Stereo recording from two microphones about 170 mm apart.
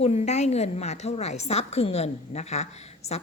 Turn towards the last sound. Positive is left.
turn(degrees=40)  # may be behind; listen again after turning